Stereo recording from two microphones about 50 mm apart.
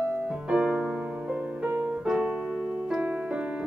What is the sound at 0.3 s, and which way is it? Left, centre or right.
Music, centre.